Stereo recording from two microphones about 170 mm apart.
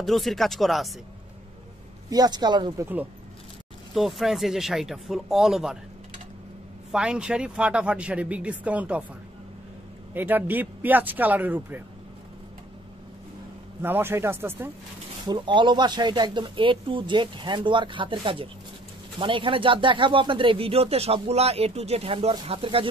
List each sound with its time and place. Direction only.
0.0 s speech: centre (ahead or behind)
2.0 s speech: 25° right (ahead or behind)
3.9 s speech: centre (ahead or behind)
6.9 s speech: 5° right (ahead or behind)
10.1 s speech: 10° right (ahead or behind)
13.8 s speech: 15° right (ahead or behind)
15.2 s speech: 30° right (ahead or behind)